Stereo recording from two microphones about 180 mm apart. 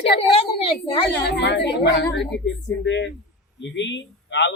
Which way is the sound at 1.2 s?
70° left (ahead or behind).